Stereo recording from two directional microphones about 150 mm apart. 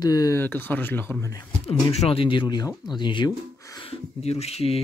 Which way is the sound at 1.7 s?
40° left (ahead or behind).